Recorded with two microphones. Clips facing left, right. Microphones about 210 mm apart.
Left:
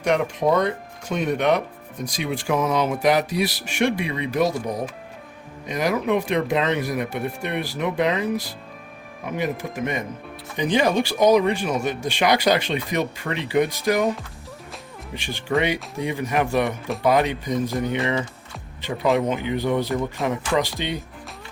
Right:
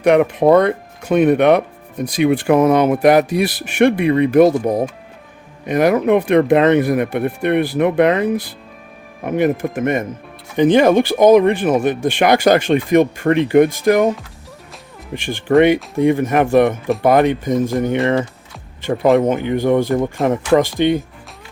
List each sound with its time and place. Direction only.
0.0 s speech: 60° right (ahead or behind)
15.1 s speech: 50° right (ahead or behind)
19.1 s speech: 50° right (ahead or behind)